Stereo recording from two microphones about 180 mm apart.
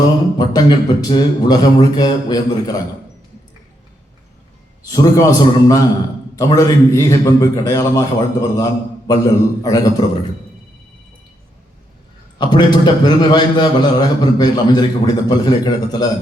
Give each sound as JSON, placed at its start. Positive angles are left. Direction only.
{"t": 0.3, "sound": "a man's voice", "side_deg": 20}
{"t": 4.9, "sound": "a man's voice", "side_deg": 20}
{"t": 12.5, "sound": "a man's voice", "side_deg": 25}